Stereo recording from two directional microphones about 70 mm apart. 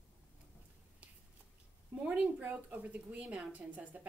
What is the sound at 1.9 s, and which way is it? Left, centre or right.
A woman's voice, centre.